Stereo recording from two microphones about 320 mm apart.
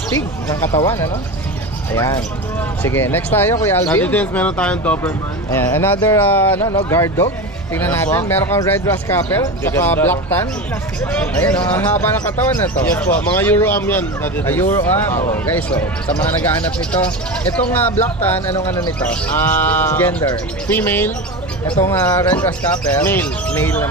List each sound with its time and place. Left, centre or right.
0.5 s speech: centre
17.7 s speech: centre